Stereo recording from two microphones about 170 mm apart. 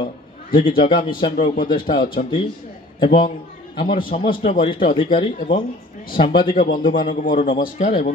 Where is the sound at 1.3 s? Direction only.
55° left (ahead or behind).